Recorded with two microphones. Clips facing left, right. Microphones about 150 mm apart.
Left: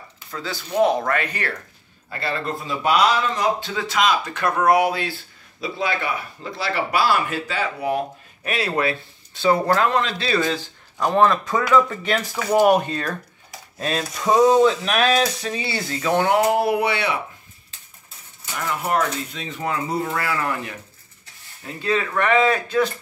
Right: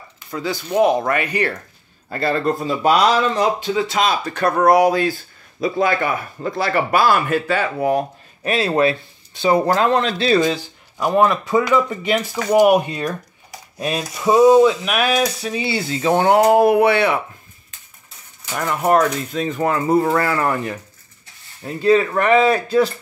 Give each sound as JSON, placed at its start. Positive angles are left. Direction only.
{"t": 0.3, "sound": "speech", "side_deg": -15}
{"t": 2.0, "sound": "speech", "side_deg": -45}
{"t": 8.5, "sound": "speech", "side_deg": -25}
{"t": 9.9, "sound": "speech", "side_deg": -35}
{"t": 10.4, "sound": "speech", "side_deg": -20}
{"t": 14.0, "sound": "speech", "side_deg": -5}
{"t": 16.0, "sound": "speech", "side_deg": -30}
{"t": 16.4, "sound": "a sound", "side_deg": -50}
{"t": 18.5, "sound": "speech", "side_deg": -50}
{"t": 20.2, "sound": "speech", "side_deg": -45}
{"t": 21.8, "sound": "speech", "side_deg": -35}